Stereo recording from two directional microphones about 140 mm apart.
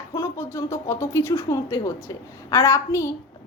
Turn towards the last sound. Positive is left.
turn(degrees=20)  # may be behind; listen again after turning